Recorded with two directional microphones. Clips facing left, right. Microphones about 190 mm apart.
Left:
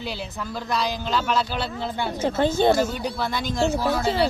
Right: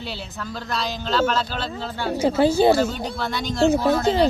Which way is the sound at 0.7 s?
10° left (ahead or behind).